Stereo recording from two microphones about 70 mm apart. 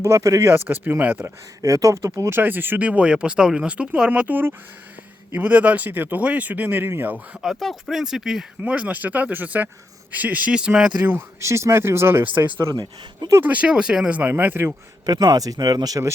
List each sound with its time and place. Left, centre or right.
0.0 s speech: right
0.5 s speech: right
1.2 s speech: right
2.2 s speech: right
7.4 s speech: centre
8.6 s speech: centre
11.3 s speech: right
12.7 s speech: right
13.4 s speech: right
14.1 s speech: right
15.0 s speech: right